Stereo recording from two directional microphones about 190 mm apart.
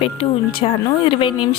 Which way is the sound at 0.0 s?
30° left (ahead or behind).